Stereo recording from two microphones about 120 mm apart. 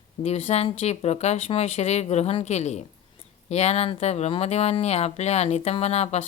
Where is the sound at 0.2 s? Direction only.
55° left (ahead or behind).